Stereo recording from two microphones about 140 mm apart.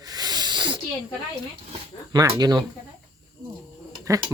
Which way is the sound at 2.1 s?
25° right (ahead or behind).